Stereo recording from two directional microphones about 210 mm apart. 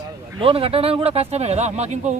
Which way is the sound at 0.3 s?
25° right (ahead or behind).